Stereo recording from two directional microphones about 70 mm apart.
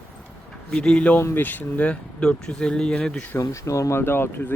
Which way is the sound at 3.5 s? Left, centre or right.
Left.